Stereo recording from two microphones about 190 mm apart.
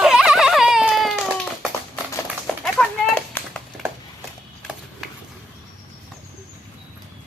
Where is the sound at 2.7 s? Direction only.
5° left (ahead or behind).